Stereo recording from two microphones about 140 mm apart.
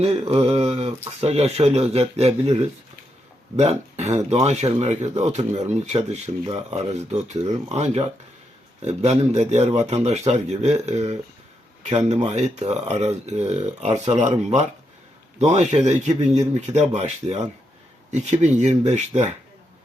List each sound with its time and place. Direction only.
0.0 s speech: 45° right (ahead or behind)